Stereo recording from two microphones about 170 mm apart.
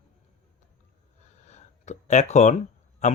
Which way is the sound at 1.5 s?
45° left (ahead or behind).